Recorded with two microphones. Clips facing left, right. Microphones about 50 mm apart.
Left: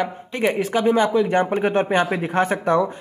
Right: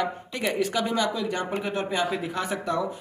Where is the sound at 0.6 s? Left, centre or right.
Left.